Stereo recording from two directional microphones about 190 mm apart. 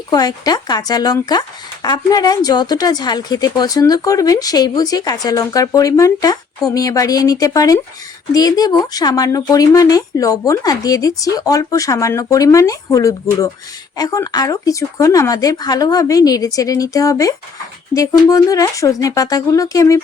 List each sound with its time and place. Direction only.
0.1 s speech: 20° left (ahead or behind)